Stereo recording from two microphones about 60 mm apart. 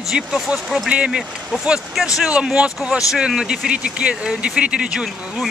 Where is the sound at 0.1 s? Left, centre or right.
Centre.